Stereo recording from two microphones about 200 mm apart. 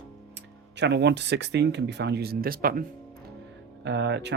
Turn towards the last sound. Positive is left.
turn(degrees=-60)  # may be behind; listen again after turning